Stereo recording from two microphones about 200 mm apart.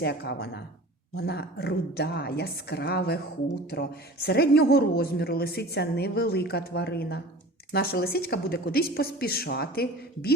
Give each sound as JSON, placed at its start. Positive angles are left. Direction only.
{"t": 0.0, "sound": "a woman's voice", "side_deg": 55}